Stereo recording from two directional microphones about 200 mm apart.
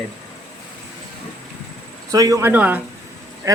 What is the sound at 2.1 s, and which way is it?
Speech, 15° right (ahead or behind).